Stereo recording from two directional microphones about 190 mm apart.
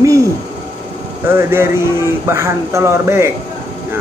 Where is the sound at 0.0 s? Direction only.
15° right (ahead or behind).